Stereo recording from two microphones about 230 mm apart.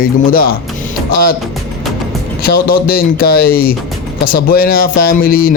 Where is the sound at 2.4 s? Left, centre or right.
Left.